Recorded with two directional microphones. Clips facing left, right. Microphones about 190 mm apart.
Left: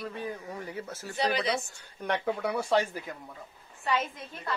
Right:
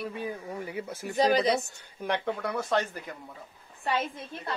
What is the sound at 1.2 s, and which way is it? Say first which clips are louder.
Speech: right 5 dB; 40° right (ahead or behind).